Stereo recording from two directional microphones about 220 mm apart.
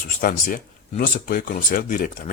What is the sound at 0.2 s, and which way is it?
Speech, 40° left (ahead or behind).